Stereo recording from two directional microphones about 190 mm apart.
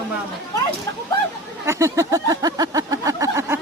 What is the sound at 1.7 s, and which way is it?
Vehicle, 15° right (ahead or behind).